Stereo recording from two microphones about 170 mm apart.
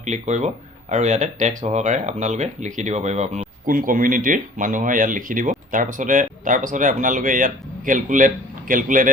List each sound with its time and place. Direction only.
0.0 s speech: 45° right (ahead or behind)